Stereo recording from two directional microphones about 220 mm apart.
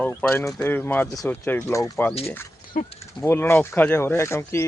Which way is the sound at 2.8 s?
35° left (ahead or behind).